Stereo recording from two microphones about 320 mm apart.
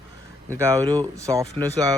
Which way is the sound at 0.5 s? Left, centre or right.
Centre.